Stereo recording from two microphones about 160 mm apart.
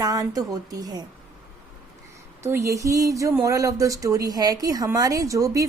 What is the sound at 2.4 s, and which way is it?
Speech, 15° right (ahead or behind).